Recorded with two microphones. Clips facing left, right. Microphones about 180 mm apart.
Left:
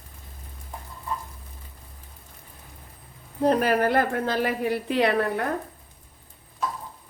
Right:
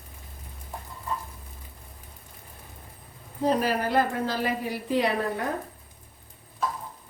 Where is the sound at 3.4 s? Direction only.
60° left (ahead or behind).